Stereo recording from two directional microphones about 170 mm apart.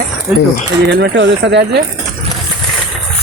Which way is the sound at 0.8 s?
80° right.